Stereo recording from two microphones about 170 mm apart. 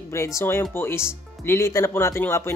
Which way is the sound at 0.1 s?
15° left (ahead or behind).